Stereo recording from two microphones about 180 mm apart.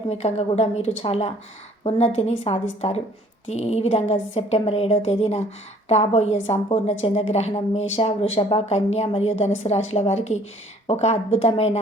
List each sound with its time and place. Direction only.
0.1 s a woman's voice: 35° left (ahead or behind)